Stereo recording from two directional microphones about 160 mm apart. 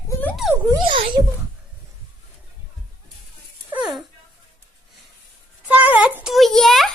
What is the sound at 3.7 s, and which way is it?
Dog, centre (ahead or behind).